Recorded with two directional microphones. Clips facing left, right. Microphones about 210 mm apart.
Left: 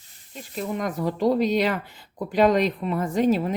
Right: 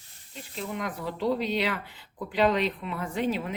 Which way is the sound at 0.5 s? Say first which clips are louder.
Left 6 dB; 45° left (ahead or behind).